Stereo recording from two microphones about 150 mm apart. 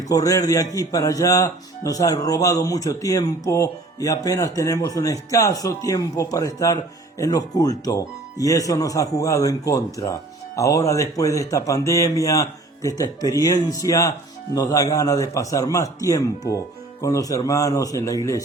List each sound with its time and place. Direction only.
0.1 s speech: 20° left (ahead or behind)